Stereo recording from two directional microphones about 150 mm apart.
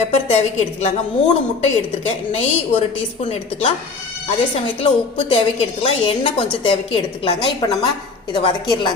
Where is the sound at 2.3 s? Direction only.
45° left (ahead or behind).